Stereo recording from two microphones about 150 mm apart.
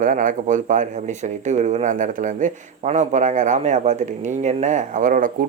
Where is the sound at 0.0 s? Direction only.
65° right (ahead or behind).